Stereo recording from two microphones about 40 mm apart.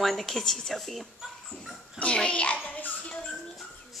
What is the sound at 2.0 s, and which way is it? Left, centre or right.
Speech, left.